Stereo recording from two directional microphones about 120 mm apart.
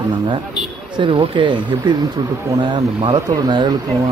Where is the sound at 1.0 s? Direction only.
45° right (ahead or behind).